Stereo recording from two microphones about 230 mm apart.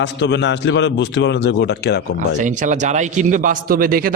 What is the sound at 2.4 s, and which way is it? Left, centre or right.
A man's voice, right.